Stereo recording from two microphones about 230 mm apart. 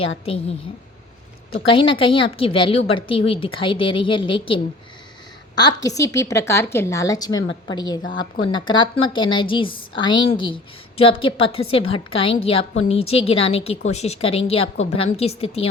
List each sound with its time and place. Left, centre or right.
0.3 s a woman's voice: left
1.6 s a woman's voice: left